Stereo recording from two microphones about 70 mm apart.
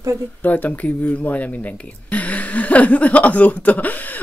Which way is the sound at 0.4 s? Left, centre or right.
Left.